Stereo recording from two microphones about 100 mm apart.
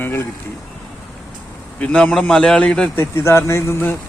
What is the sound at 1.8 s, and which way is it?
Speech, 10° left (ahead or behind).